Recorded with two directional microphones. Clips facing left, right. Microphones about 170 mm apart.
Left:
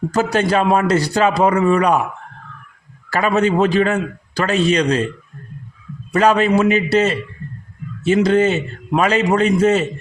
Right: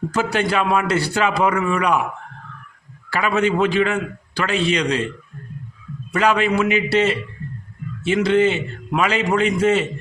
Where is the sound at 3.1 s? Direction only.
40° left (ahead or behind).